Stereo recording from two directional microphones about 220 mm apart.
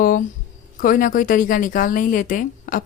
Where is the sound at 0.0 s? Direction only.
40° left (ahead or behind).